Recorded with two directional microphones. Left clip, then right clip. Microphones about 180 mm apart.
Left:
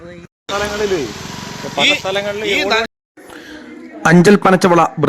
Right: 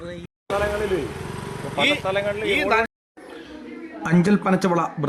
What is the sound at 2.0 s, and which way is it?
Speech, 65° left (ahead or behind).